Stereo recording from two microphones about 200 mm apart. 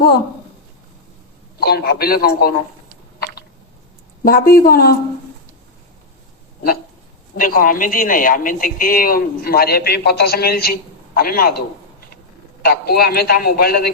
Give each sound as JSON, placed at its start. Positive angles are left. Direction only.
{"t": 1.5, "sound": "speech", "side_deg": 50}
{"t": 4.2, "sound": "speech", "side_deg": 45}
{"t": 7.3, "sound": "a man's voice", "side_deg": 45}